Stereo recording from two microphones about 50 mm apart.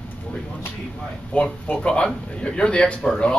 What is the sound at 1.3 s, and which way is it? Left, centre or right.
Speech, left.